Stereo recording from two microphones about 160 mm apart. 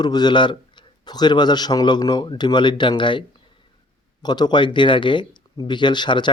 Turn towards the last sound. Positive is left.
turn(degrees=30)  # may be behind; listen again after turning